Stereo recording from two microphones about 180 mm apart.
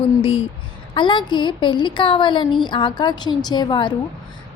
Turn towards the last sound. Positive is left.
turn(degrees=25)  # may be behind; listen again after turning